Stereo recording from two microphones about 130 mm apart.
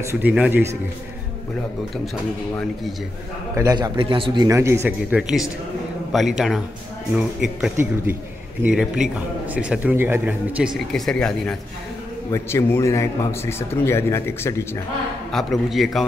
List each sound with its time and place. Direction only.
0.0 s a man's voice: 15° right (ahead or behind)
3.5 s a man's voice: 30° right (ahead or behind)
4.0 s speech: 40° right (ahead or behind)
4.5 s a man's voice: 20° right (ahead or behind)
5.1 s a man's voice: 5° right (ahead or behind)
7.7 s a man's voice: 15° right (ahead or behind)
8.6 s a man's voice: 5° right (ahead or behind)
10.9 s a man's voice: 5° left (ahead or behind)
12.3 s a man's voice: 20° left (ahead or behind)
15.3 s a man's voice: centre (ahead or behind)